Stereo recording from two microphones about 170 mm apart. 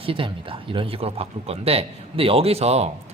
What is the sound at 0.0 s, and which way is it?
A woman's voice, 30° right (ahead or behind).